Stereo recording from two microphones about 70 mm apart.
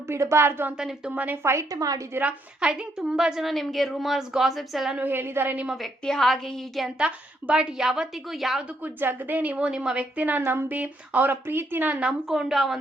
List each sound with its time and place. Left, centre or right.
0.1 s a woman's voice: right
0.8 s a woman's voice: centre
1.2 s a woman's voice: right
1.5 s a woman's voice: right
2.6 s a woman's voice: centre
4.9 s a woman's voice: right
5.6 s a woman's voice: centre
7.0 s a woman's voice: centre
8.8 s a woman's voice: right
10.2 s a woman's voice: right
12.0 s a woman's voice: centre